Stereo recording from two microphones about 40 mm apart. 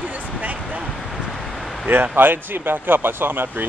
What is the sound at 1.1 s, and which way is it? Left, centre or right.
Vehicle, centre.